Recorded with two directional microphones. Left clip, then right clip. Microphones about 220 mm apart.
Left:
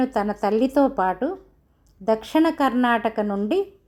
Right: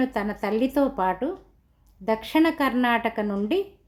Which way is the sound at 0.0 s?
15° left (ahead or behind).